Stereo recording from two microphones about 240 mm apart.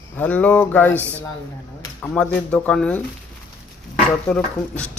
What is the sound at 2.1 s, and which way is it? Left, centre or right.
Speech, centre.